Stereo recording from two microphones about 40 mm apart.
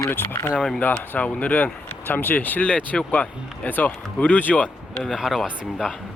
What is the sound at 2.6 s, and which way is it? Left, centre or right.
Speech, left.